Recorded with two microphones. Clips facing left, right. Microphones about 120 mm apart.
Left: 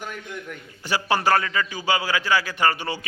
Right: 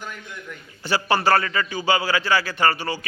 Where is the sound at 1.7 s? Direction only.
10° left (ahead or behind).